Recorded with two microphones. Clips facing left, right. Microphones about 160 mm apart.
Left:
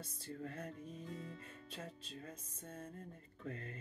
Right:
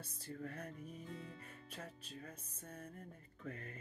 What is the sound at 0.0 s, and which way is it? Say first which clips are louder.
Music: left 1 dB; 25° left (ahead or behind).